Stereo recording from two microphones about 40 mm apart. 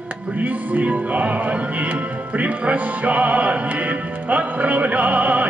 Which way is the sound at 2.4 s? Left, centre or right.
Right.